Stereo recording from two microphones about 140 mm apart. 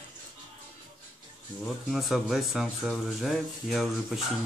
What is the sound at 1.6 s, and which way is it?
Speech, centre (ahead or behind).